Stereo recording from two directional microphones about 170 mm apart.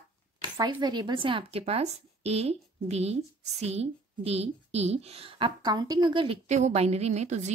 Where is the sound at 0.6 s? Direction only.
25° right (ahead or behind).